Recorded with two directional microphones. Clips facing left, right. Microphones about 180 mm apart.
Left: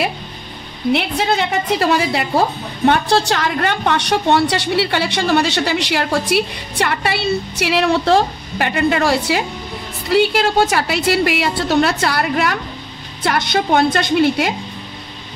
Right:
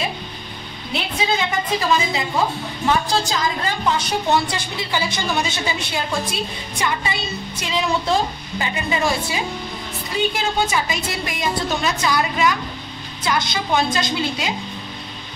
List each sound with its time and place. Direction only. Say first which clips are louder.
0.9 s a woman's voice: left 3 dB; 70° left (ahead or behind)